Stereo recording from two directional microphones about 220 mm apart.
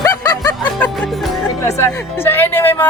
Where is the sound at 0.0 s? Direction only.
15° left (ahead or behind).